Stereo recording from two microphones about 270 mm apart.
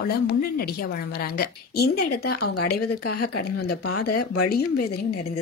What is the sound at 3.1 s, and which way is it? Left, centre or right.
Speech, left.